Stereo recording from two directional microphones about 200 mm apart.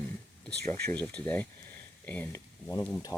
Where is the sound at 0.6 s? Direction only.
10° left (ahead or behind).